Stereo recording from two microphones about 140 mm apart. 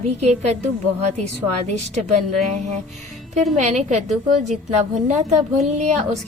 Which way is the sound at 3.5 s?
55° right (ahead or behind).